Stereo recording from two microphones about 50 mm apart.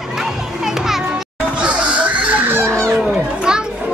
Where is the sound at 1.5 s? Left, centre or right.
Right.